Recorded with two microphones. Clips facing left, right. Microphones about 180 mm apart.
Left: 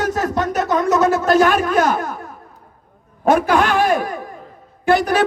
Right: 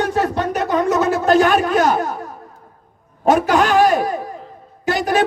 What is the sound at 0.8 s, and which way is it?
Speech, 35° right (ahead or behind).